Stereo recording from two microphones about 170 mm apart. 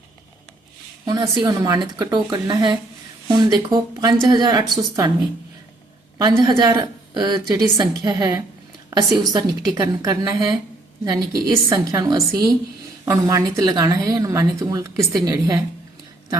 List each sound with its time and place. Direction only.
1.2 s speech: 25° right (ahead or behind)
6.2 s speech: 25° right (ahead or behind)